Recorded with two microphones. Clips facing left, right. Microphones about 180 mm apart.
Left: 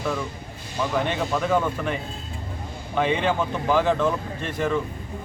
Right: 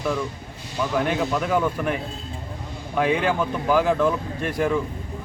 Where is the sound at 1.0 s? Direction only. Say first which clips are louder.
Right 1 dB; 5° right (ahead or behind).